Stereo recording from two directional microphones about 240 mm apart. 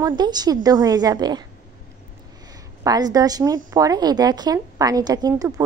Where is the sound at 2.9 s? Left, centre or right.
Centre.